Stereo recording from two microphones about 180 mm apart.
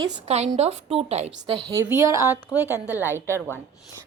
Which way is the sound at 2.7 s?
15° left (ahead or behind).